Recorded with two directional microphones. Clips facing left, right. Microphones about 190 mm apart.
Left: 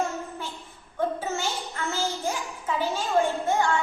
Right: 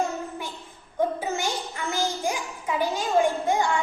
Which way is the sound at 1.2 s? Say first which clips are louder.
Right 2 dB; 15° right (ahead or behind).